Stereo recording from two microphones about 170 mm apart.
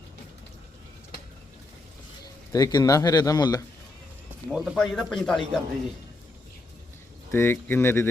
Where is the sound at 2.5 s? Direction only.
20° left (ahead or behind).